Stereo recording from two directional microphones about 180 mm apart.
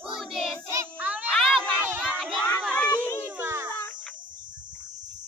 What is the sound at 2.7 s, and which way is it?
Children playing, 10° left (ahead or behind).